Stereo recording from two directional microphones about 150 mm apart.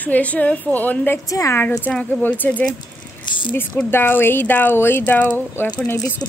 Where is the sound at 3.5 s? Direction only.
10° left (ahead or behind).